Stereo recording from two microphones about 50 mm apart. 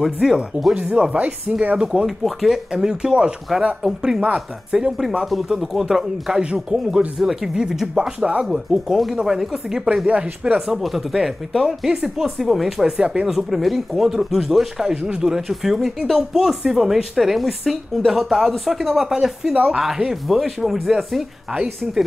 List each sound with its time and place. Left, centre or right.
0.0 s speech: centre
0.7 s speech: right
2.0 s speech: centre
2.7 s speech: centre
5.2 s speech: centre
10.0 s speech: right
10.7 s speech: centre
13.3 s speech: centre